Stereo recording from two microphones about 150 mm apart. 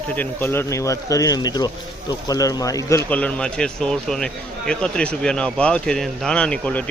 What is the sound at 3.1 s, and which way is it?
Speech, 10° left (ahead or behind).